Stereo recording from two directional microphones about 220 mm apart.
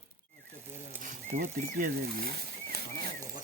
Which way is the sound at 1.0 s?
35° right (ahead or behind).